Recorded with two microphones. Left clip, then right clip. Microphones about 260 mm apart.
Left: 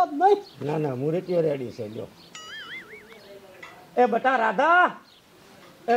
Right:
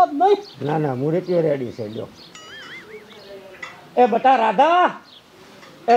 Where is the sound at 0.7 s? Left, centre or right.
Centre.